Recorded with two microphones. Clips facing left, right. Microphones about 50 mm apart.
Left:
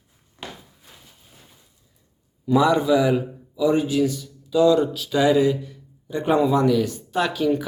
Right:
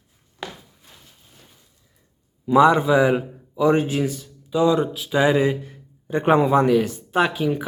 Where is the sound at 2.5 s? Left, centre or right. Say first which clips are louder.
Right 3 dB; right.